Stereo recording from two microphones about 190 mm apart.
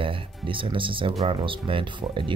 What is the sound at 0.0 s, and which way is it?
Speech, 25° right (ahead or behind).